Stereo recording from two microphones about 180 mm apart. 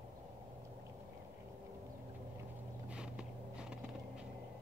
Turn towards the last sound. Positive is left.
turn(degrees=-5)  # may be behind; listen again after turning